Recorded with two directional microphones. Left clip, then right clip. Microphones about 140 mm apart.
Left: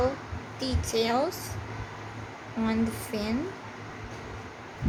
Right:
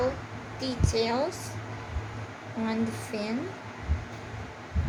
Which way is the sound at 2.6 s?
20° left (ahead or behind).